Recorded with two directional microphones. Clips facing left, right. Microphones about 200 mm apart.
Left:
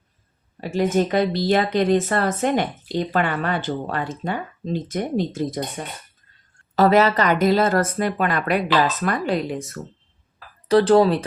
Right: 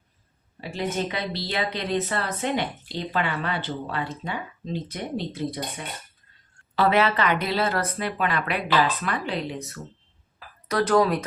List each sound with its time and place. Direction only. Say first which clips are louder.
0.6 s speech: left 8 dB; 50° left (ahead or behind)
10.7 s speech: left 6 dB; 30° left (ahead or behind)